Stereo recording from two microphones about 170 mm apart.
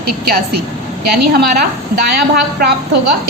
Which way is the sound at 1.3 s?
70° right (ahead or behind).